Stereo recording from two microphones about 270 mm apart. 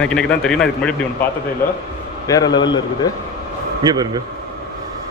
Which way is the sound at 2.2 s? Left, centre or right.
Centre.